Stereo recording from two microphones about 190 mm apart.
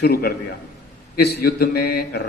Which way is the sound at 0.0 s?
55° left (ahead or behind).